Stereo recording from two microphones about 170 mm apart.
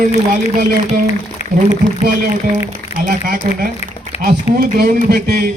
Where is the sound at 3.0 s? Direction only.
50° right (ahead or behind).